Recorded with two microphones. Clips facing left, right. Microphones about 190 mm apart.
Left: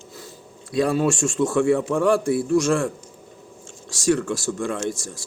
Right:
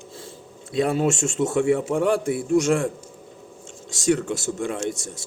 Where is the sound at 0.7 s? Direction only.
20° right (ahead or behind).